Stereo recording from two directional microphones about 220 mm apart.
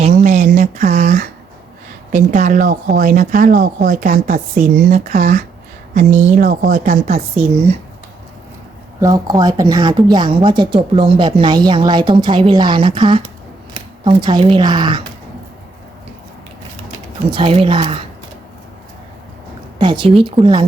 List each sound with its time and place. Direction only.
0.0 s a sound: 35° right (ahead or behind)
2.1 s speech: 35° right (ahead or behind)
9.0 s speech: 15° right (ahead or behind)
17.3 s speech: 25° right (ahead or behind)
19.8 s speech: 20° right (ahead or behind)